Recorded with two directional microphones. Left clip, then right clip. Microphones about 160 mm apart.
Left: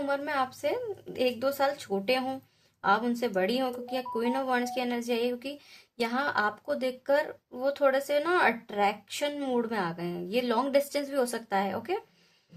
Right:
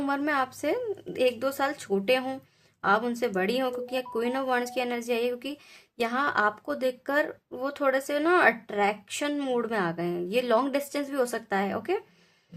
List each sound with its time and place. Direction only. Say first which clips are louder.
0.0 s speech: right 2 dB; 40° right (ahead or behind)